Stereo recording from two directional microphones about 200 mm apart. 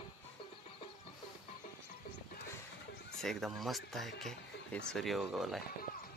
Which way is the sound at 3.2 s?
Centre (ahead or behind).